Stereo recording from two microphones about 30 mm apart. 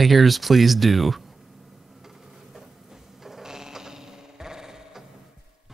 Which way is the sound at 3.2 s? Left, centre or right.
Centre.